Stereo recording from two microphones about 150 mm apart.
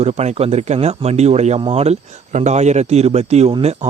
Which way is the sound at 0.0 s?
45° right (ahead or behind).